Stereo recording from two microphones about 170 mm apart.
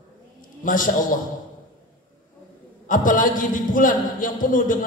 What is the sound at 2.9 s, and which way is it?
A man's voice, 50° left (ahead or behind).